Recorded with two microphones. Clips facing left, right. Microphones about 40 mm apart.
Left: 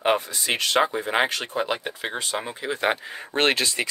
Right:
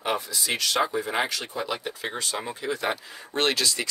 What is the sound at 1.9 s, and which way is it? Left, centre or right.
Speech, left.